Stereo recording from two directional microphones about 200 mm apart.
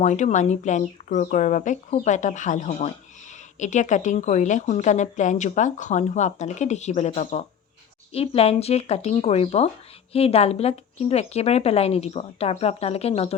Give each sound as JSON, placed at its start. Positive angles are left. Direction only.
{"t": 0.0, "sound": "a woman's voice", "side_deg": 35}